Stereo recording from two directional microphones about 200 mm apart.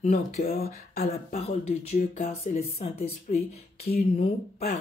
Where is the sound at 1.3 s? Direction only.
35° left (ahead or behind).